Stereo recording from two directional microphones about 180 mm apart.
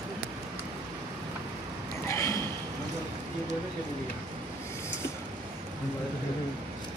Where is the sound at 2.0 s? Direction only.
15° left (ahead or behind).